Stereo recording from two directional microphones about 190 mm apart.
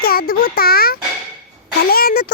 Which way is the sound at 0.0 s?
50° left (ahead or behind).